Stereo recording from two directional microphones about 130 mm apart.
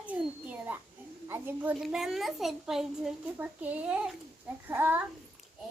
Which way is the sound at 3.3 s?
15° right (ahead or behind).